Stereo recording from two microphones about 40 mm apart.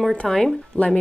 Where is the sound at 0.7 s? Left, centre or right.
Left.